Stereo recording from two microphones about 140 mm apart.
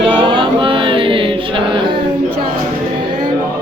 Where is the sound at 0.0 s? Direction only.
35° right (ahead or behind).